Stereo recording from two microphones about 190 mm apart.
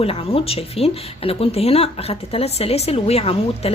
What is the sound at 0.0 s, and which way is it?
Speech, 30° left (ahead or behind).